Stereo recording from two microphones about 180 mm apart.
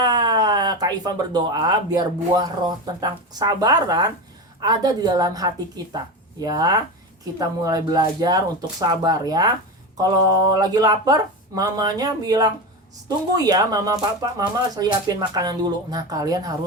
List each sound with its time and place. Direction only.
0.0 s speech: 20° right (ahead or behind)
10.5 s speech: 20° right (ahead or behind)